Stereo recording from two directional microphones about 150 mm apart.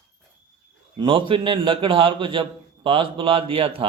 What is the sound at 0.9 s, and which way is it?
A man's voice, 35° right (ahead or behind).